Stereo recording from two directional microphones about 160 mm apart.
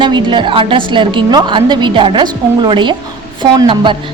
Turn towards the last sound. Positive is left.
turn(degrees=-30)  # may be behind; listen again after turning